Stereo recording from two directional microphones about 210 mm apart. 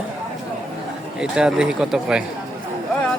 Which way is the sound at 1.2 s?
5° right (ahead or behind).